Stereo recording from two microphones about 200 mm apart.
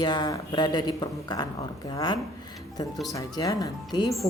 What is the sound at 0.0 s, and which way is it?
Speech, 20° left (ahead or behind).